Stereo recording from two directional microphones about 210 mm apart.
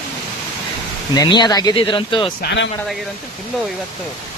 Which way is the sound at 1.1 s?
20° left (ahead or behind).